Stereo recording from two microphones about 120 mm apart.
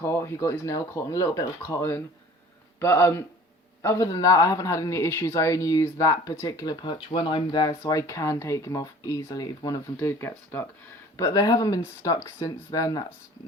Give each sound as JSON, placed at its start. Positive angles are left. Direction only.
{"t": 0.0, "sound": "a man's voice", "side_deg": 20}
{"t": 7.9, "sound": "a man's voice", "side_deg": 25}
{"t": 10.0, "sound": "a man's voice", "side_deg": 20}
{"t": 11.2, "sound": "a man's voice", "side_deg": 35}